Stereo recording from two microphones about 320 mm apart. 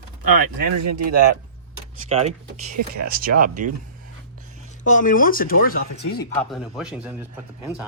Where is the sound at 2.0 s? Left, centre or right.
Right.